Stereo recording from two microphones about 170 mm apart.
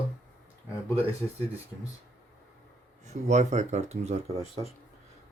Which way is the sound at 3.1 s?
45° right (ahead or behind).